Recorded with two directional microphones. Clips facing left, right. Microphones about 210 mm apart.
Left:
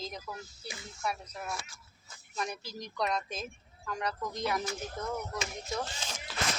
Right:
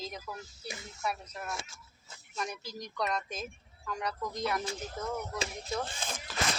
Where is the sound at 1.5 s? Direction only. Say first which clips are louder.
Even; 25° right (ahead or behind).